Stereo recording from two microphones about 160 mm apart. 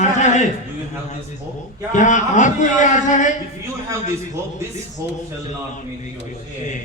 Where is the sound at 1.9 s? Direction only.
50° left (ahead or behind).